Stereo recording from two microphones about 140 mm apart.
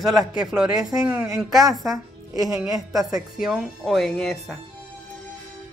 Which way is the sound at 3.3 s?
5° right (ahead or behind).